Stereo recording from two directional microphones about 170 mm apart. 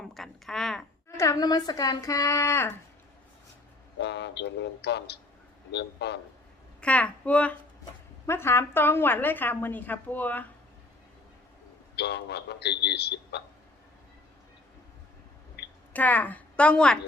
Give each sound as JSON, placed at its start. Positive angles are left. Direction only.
{"t": 0.0, "sound": "a sound", "side_deg": 0}
{"t": 1.1, "sound": "a woman's voice", "side_deg": 20}
{"t": 3.9, "sound": "a man's voice", "side_deg": 90}
{"t": 6.8, "sound": "a woman's voice", "side_deg": 5}
{"t": 11.9, "sound": "a man's voice", "side_deg": 80}
{"t": 15.9, "sound": "a woman's voice", "side_deg": 10}